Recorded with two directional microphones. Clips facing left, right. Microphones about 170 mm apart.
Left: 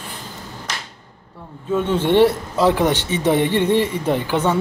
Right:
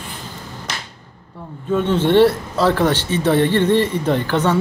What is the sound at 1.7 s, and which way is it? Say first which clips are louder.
Speech: right 2 dB; 10° left (ahead or behind).